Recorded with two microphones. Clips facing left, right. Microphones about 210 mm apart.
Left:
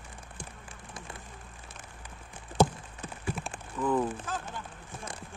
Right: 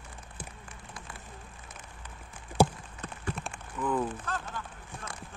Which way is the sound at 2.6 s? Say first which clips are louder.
Even; 10° right (ahead or behind).